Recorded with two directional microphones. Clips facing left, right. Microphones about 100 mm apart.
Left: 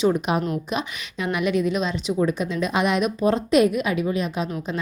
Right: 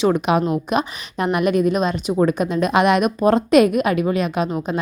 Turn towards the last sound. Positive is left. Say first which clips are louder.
# right 5 dB
turn(degrees=-55)  # may be behind; listen again after turning